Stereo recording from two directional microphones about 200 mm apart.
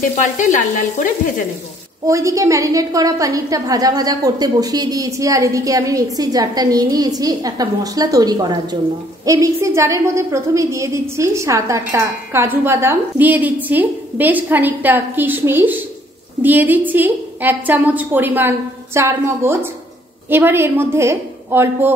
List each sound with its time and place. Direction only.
0.1 s stir: 40° left (ahead or behind)
2.0 s a woman's voice: 15° right (ahead or behind)